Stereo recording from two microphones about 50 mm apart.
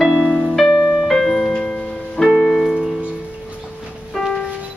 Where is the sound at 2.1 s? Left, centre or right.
Centre.